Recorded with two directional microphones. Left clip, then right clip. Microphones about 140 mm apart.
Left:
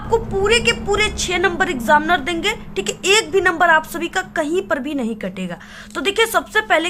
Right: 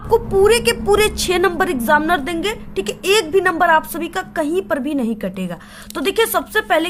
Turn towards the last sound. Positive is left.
turn(degrees=-25)  # may be behind; listen again after turning